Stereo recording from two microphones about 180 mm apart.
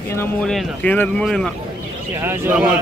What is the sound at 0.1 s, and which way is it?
Speech, 15° left (ahead or behind).